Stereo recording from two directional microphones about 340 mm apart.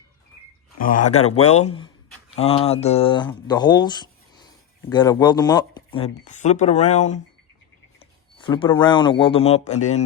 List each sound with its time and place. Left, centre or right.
0.9 s speech: left
1.5 s a man's voice: centre